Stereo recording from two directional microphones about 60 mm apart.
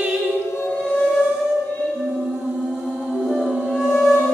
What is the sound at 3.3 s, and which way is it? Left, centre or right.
Music, centre.